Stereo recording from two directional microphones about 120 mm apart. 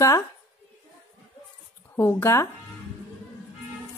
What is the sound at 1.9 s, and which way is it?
Speech, 20° left (ahead or behind).